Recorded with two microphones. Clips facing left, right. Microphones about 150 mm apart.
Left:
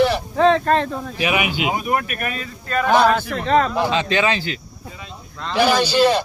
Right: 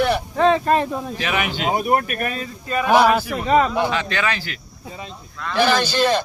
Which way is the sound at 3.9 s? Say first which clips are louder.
Left 4 dB; 20° left (ahead or behind).